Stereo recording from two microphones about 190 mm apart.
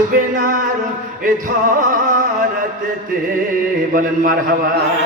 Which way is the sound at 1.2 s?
45° right (ahead or behind).